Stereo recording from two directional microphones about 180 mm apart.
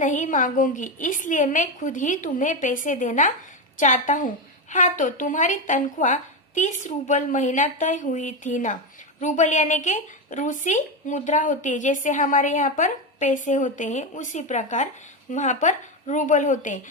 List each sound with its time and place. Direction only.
0.0 s a woman's voice: 45° left (ahead or behind)